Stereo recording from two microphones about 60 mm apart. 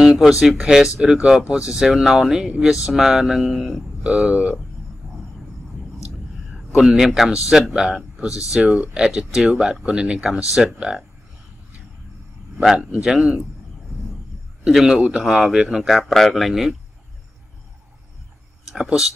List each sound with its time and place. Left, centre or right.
0.0 s speech: centre
4.0 s speech: right
6.5 s a man's voice: centre
12.7 s speech: centre
14.6 s a man's voice: centre
18.7 s speech: centre